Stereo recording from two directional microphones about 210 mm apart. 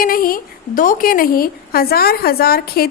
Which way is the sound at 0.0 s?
45° left (ahead or behind).